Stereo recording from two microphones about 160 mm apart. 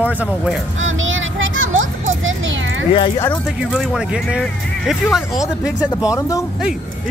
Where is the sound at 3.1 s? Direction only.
15° left (ahead or behind).